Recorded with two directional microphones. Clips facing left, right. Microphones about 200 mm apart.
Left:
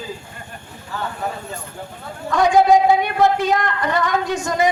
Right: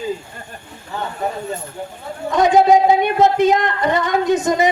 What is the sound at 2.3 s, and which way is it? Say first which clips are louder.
A man's voice: right 1 dB; 20° right (ahead or behind).